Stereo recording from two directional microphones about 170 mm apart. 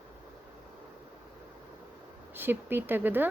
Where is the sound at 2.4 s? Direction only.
10° right (ahead or behind).